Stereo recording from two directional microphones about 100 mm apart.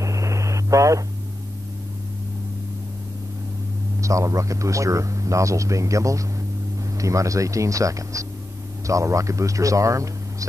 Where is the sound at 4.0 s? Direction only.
30° right (ahead or behind).